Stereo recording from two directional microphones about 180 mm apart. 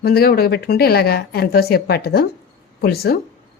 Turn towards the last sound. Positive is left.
turn(degrees=60)  # may be behind; listen again after turning